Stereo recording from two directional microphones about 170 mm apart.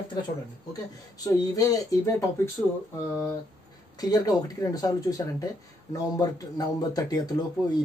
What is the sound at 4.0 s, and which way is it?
Speech, 20° left (ahead or behind).